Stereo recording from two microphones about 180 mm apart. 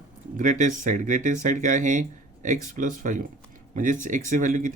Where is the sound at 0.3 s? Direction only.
45° right (ahead or behind).